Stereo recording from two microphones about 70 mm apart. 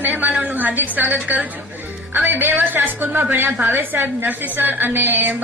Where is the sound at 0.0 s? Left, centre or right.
Right.